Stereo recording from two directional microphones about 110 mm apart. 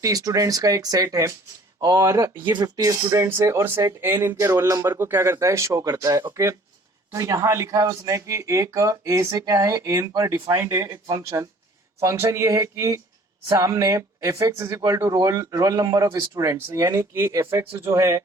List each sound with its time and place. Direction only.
0.0 s speech: 30° right (ahead or behind)
16.3 s speech: 25° right (ahead or behind)